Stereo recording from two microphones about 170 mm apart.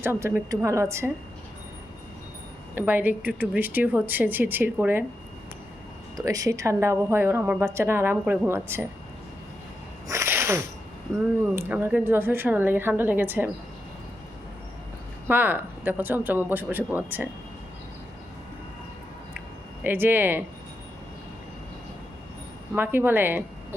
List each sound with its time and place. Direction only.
0.0 s a woman's voice: 15° right (ahead or behind)
2.7 s a woman's voice: 10° right (ahead or behind)
6.1 s a woman's voice: 20° right (ahead or behind)
10.1 s sneeze: 15° right (ahead or behind)
11.1 s a woman's voice: 15° right (ahead or behind)
15.3 s a woman's voice: 10° right (ahead or behind)
19.8 s a woman's voice: 10° right (ahead or behind)
22.7 s a woman's voice: 10° right (ahead or behind)